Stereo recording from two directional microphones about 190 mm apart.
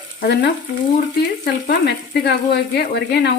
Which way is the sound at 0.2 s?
55° left (ahead or behind).